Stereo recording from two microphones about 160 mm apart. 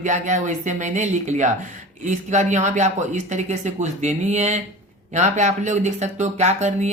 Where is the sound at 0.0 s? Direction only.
50° right (ahead or behind).